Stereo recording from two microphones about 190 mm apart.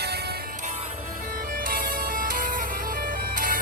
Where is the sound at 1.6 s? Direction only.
50° right (ahead or behind).